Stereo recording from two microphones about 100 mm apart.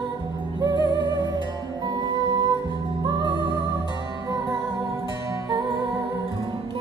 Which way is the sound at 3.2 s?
50° right (ahead or behind).